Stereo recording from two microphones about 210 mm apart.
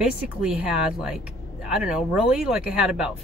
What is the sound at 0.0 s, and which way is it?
Speech, 5° right (ahead or behind).